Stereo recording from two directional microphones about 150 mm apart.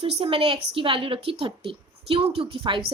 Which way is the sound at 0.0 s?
40° right (ahead or behind).